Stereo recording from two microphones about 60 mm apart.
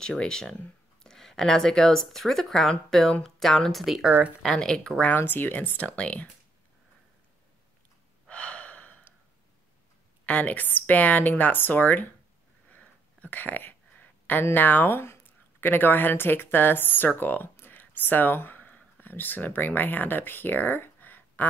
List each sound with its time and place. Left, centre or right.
0.0 s speech: centre
4.6 s speech: centre
5.0 s speech: left
5.8 s speech: left
8.3 s gasp: left
10.2 s speech: left
12.6 s a sound: left
15.6 s speech: left